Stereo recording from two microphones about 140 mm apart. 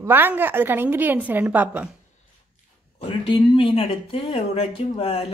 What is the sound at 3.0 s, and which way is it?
Speech, 40° left (ahead or behind).